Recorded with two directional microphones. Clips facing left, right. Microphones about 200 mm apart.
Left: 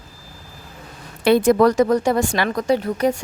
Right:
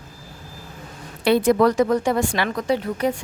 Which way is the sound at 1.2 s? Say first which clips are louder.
Left 2 dB; 50° left (ahead or behind).